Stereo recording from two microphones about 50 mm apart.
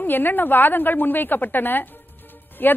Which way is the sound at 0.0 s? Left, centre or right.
Left.